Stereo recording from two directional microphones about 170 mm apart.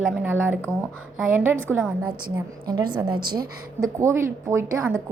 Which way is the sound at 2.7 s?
20° right (ahead or behind).